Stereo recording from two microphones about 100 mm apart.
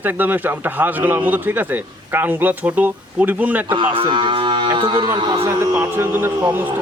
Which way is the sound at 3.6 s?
55° right (ahead or behind).